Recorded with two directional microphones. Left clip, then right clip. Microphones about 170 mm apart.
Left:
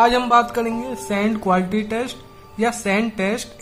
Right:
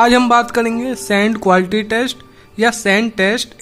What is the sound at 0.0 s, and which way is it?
Speech, 40° right (ahead or behind).